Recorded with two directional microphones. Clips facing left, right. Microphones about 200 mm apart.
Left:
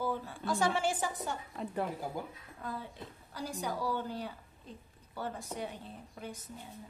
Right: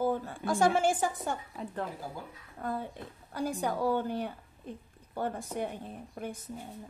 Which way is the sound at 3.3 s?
55° right (ahead or behind).